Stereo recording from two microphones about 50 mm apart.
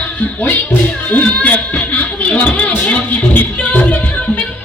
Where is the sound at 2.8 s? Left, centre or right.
Left.